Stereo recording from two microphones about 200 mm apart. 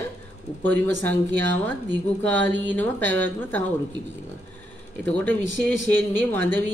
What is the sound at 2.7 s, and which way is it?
A woman's voice, 10° left (ahead or behind).